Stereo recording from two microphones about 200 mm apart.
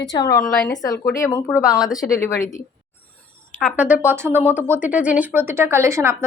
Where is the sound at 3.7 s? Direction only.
5° right (ahead or behind).